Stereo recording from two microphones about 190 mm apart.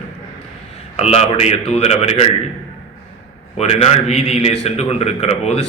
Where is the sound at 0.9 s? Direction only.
35° left (ahead or behind).